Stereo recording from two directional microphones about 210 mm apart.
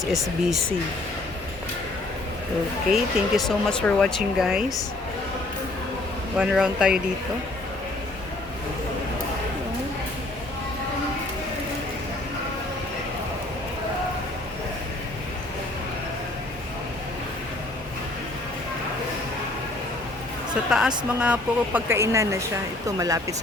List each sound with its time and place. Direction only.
2.9 s speech: centre (ahead or behind)
6.3 s speech: 5° right (ahead or behind)
20.7 s speech: 5° right (ahead or behind)